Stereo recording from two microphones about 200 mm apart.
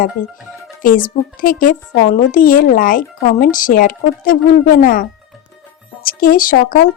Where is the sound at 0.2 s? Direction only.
40° left (ahead or behind).